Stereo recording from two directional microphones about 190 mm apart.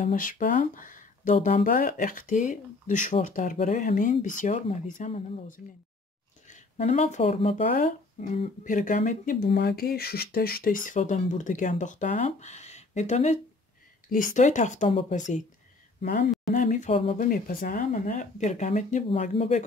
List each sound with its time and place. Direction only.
0.0 s speech: 45° left (ahead or behind)
7.6 s speech: 45° left (ahead or behind)
17.2 s speech: 45° left (ahead or behind)